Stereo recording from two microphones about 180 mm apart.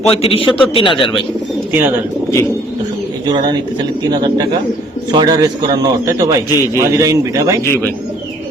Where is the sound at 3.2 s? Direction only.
25° right (ahead or behind).